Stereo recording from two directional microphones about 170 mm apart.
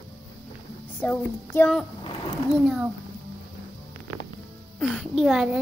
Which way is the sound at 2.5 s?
5° right (ahead or behind).